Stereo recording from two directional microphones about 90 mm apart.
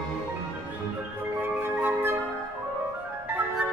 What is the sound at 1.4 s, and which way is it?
Flute, 25° right (ahead or behind).